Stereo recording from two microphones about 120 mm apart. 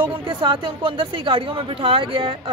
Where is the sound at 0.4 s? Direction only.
45° right (ahead or behind).